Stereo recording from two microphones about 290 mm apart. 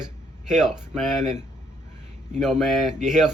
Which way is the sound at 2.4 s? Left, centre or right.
Centre.